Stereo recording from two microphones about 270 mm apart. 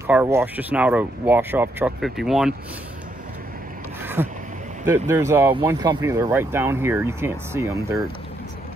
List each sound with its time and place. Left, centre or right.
0.0 s speech: centre
4.0 s a sound: centre
4.8 s speech: centre